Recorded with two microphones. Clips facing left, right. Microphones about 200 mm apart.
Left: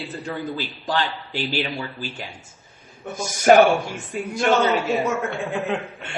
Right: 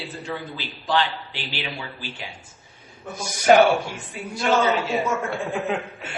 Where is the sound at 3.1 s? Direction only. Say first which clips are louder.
Left 2 dB; 45° left (ahead or behind).